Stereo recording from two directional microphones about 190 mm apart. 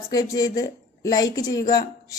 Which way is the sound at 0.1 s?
20° left (ahead or behind).